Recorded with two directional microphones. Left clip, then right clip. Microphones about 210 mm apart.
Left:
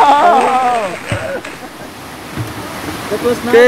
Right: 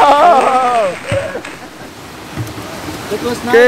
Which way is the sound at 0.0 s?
55° right (ahead or behind).